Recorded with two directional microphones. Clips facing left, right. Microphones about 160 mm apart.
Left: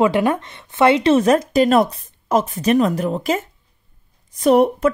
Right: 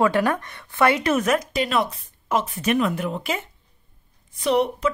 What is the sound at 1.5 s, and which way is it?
Speech, 45° left (ahead or behind).